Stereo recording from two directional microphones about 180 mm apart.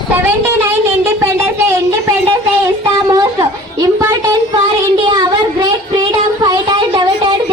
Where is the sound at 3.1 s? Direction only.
20° right (ahead or behind).